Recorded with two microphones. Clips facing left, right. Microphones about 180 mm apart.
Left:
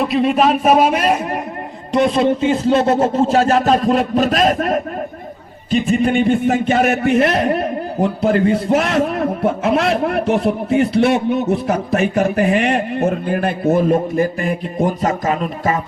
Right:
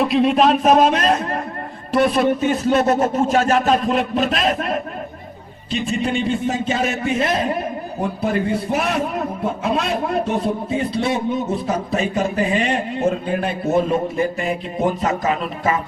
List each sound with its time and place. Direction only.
0.0 s a man's voice: centre (ahead or behind)
1.9 s a man's voice: 20° left (ahead or behind); by 15.8 s 45° left (ahead or behind)